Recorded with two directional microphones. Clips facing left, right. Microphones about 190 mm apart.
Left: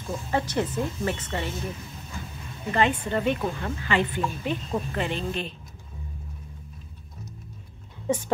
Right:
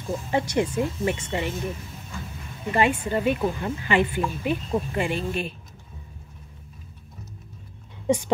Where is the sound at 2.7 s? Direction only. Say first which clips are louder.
Right 2 dB; 10° right (ahead or behind).